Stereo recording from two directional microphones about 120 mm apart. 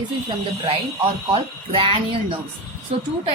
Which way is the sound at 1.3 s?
50° right (ahead or behind).